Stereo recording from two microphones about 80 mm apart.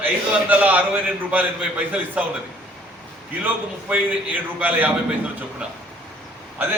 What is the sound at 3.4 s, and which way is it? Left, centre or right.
A man's voice, centre.